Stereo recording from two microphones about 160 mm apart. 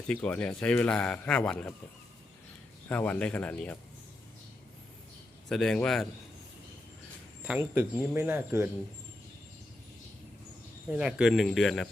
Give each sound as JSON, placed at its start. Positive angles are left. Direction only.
{"t": 0.1, "sound": "a man's voice", "side_deg": 5}
{"t": 2.9, "sound": "a man's voice", "side_deg": 10}
{"t": 5.5, "sound": "speech", "side_deg": 5}
{"t": 7.4, "sound": "speech", "side_deg": -10}
{"t": 10.8, "sound": "speech", "side_deg": -5}